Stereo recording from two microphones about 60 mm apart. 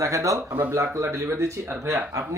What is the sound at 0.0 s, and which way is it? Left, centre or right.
Speech, right.